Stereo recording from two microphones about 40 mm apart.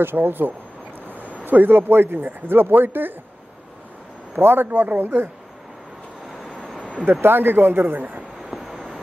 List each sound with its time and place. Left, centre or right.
0.0 s speech: right
1.0 s a sound: right
1.4 s speech: right
4.4 s a man's voice: right
4.6 s a man's voice: right
6.3 s vehicle: centre
7.1 s speech: right